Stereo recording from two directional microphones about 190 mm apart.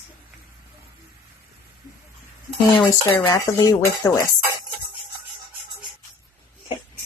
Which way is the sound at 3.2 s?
20° left (ahead or behind).